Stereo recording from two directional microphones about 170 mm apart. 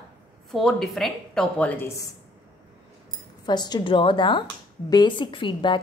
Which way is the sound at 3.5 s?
25° left (ahead or behind).